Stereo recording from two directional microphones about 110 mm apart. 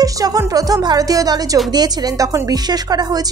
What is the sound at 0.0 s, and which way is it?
A woman's voice, 35° right (ahead or behind).